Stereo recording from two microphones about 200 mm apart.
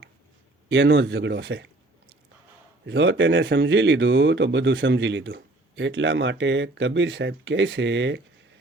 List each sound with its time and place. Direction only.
0.7 s speech: 65° right (ahead or behind)
2.8 s speech: 65° right (ahead or behind)